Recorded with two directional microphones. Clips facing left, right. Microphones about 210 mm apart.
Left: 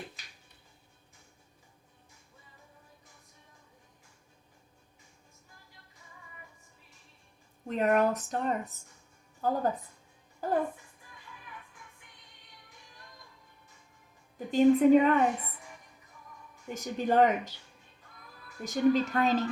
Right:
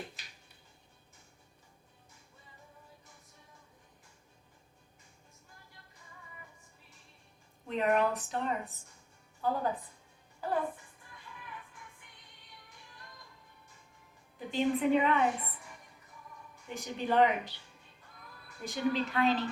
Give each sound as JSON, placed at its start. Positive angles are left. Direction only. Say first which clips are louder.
{"t": 7.7, "sound": "speech", "louder": "left 3 dB", "side_deg": 45}
{"t": 14.3, "sound": "speech", "louder": "left 8 dB", "side_deg": 45}
{"t": 16.7, "sound": "speech", "louder": "left 3 dB", "side_deg": 45}
{"t": 18.6, "sound": "speech", "louder": "left 6 dB", "side_deg": 45}